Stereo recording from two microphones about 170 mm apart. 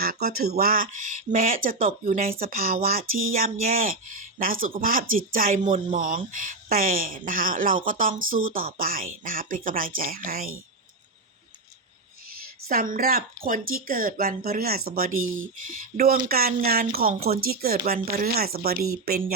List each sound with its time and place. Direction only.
0.0 s speech: 60° right (ahead or behind)
12.6 s speech: 55° right (ahead or behind)